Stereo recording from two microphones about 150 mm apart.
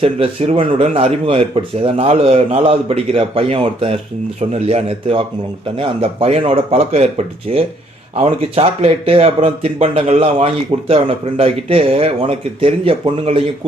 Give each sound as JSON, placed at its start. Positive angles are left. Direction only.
{"t": 0.0, "sound": "a man's voice", "side_deg": -40}